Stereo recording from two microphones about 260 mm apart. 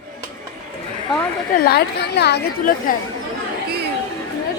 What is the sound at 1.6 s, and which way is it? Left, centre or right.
A woman's voice, left.